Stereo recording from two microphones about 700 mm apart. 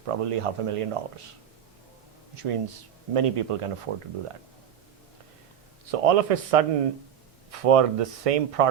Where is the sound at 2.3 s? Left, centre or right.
Right.